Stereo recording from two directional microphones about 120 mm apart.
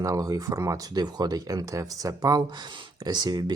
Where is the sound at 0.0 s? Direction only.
30° right (ahead or behind).